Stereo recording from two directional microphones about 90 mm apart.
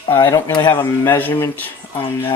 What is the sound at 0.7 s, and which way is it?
Speech, 20° left (ahead or behind).